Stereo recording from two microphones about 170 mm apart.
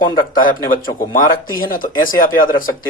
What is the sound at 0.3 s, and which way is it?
Speech, 55° left (ahead or behind).